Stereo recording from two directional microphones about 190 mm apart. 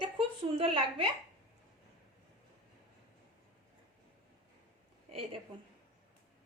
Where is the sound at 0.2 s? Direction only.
30° right (ahead or behind).